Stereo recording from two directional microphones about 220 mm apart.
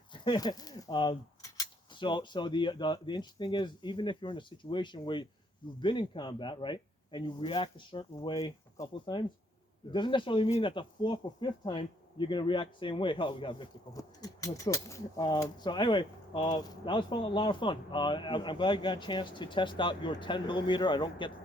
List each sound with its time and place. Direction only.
0.1 s speech: 20° left (ahead or behind)